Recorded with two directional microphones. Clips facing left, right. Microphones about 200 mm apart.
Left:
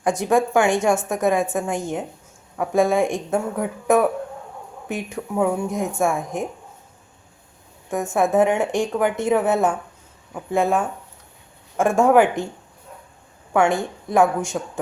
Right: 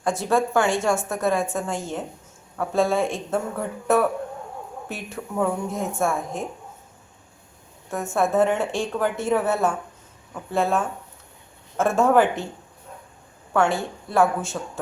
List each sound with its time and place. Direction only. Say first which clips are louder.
0.0 s speech: left 3 dB; 15° left (ahead or behind)
7.9 s speech: left 3 dB; 15° left (ahead or behind)
13.5 s speech: left 3 dB; 15° left (ahead or behind)